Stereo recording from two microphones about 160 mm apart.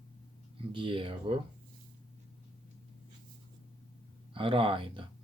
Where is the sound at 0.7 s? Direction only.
30° right (ahead or behind).